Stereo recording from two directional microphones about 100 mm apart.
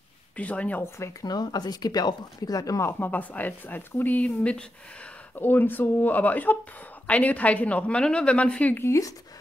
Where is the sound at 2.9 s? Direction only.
20° left (ahead or behind).